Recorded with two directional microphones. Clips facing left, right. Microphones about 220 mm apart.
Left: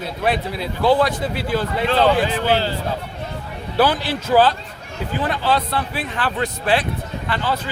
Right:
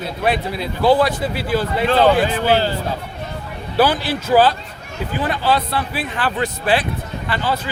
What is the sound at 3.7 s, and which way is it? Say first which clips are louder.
A man's voice: right 1 dB; 5° right (ahead or behind).